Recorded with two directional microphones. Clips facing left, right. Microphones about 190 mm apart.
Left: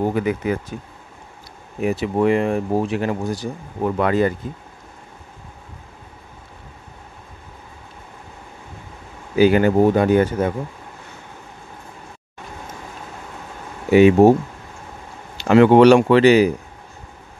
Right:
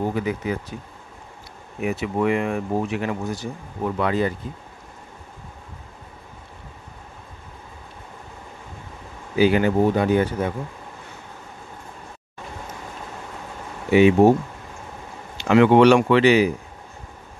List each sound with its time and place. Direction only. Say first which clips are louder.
0.1 s speech: left 4 dB; 55° left (ahead or behind)
1.8 s speech: left 4 dB; 35° left (ahead or behind)
3.8 s speech: left 4 dB; 50° left (ahead or behind)
9.4 s speech: left 4 dB; 50° left (ahead or behind)
13.9 s speech: left 3 dB; 45° left (ahead or behind)
15.3 s speech: left 3 dB; 35° left (ahead or behind)